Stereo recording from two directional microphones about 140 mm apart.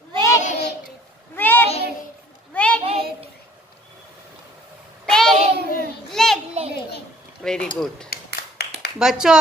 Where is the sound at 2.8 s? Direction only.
45° right (ahead or behind).